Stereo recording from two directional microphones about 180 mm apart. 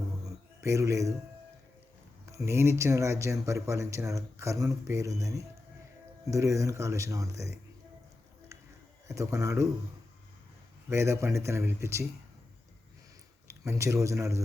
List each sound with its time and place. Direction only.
0.6 s speech: 15° right (ahead or behind)
2.2 s speech: 15° right (ahead or behind)
9.0 s speech: 15° right (ahead or behind)
10.8 s speech: 15° right (ahead or behind)
13.5 s speech: 15° right (ahead or behind)